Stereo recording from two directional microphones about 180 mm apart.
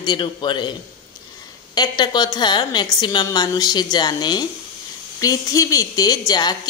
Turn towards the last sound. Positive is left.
turn(degrees=20)  # may be behind; listen again after turning